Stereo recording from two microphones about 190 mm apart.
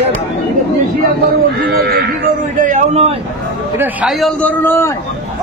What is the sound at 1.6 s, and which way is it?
Speech, 55° right (ahead or behind).